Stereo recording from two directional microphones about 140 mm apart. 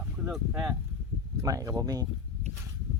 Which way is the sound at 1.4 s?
25° right (ahead or behind).